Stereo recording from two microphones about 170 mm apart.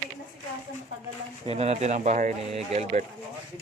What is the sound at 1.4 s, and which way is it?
Speech, 35° right (ahead or behind).